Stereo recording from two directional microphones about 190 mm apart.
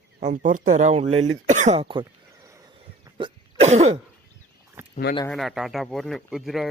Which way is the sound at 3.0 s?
25° right (ahead or behind).